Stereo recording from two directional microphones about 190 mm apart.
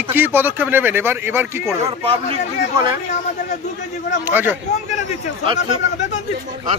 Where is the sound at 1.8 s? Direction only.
30° right (ahead or behind).